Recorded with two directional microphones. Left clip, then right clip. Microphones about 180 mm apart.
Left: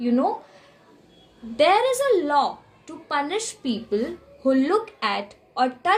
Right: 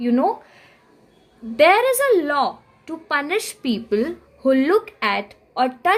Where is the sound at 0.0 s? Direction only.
45° right (ahead or behind).